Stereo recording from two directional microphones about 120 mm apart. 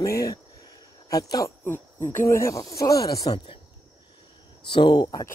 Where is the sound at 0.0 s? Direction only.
30° left (ahead or behind).